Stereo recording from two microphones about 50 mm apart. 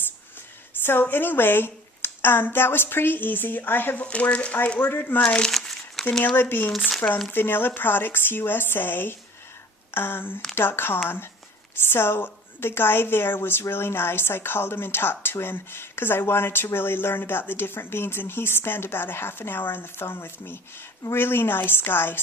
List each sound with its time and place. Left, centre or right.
1.0 s a woman's voice: left
4.0 s speech: left
4.8 s a woman's voice: left
5.2 s speech: centre
5.5 s crumpling: centre
6.3 s a woman's voice: left